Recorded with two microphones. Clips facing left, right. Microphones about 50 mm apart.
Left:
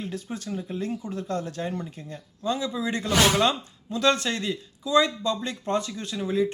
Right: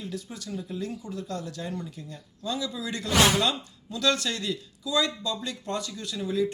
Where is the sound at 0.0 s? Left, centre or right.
Left.